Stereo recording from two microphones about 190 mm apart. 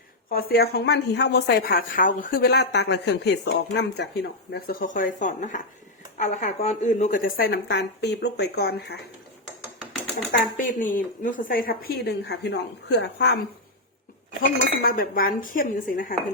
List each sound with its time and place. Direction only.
0.3 s a woman's voice: 55° left (ahead or behind)
10.3 s a woman's voice: 45° left (ahead or behind); by 13.4 s 60° left (ahead or behind)
14.4 s a woman's voice: 50° left (ahead or behind)